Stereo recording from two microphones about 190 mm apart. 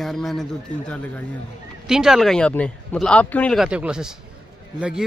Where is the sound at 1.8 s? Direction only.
Centre (ahead or behind).